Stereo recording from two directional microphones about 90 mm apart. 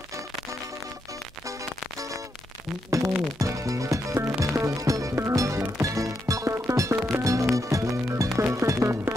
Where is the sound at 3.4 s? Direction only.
35° right (ahead or behind).